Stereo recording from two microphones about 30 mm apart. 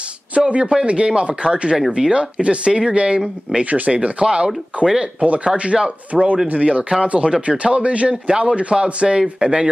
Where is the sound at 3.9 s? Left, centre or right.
Right.